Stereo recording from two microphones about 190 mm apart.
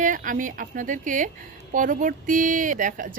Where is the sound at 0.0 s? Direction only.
45° right (ahead or behind).